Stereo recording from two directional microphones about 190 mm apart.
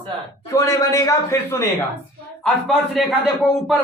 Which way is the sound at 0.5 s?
15° left (ahead or behind).